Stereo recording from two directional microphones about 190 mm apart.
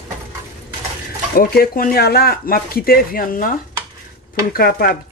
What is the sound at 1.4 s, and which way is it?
Speech, 50° left (ahead or behind).